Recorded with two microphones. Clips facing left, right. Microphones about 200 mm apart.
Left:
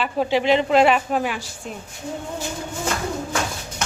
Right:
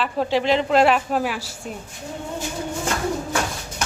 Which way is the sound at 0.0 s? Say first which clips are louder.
Left 1 dB; centre (ahead or behind).